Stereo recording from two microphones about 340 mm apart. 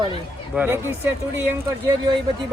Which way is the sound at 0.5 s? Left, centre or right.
Centre.